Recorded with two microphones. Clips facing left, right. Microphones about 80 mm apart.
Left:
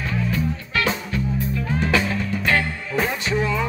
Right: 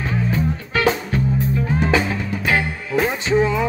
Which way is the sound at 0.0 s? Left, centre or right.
Right.